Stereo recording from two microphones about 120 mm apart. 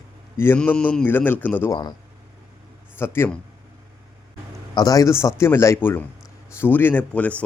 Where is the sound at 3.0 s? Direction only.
20° left (ahead or behind).